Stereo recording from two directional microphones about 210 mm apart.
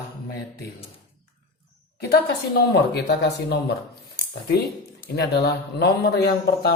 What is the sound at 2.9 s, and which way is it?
Speech, 50° left (ahead or behind).